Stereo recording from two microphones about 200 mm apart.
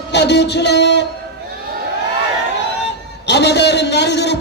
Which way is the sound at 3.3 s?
60° left (ahead or behind).